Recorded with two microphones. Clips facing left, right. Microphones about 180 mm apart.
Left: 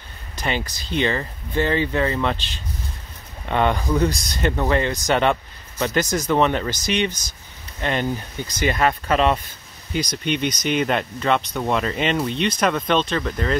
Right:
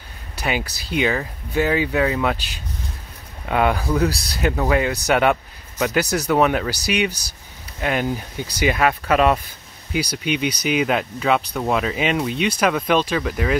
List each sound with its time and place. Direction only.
0.4 s speech: 10° right (ahead or behind)
3.4 s speech: 5° right (ahead or behind)